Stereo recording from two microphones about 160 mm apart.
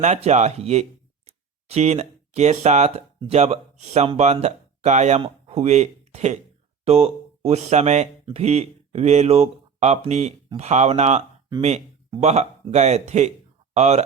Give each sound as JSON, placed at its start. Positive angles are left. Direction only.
{"t": 0.0, "sound": "speech", "side_deg": -45}
{"t": 12.2, "sound": "speech", "side_deg": -45}